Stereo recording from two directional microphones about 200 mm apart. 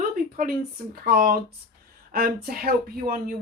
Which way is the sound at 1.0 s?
50° right (ahead or behind).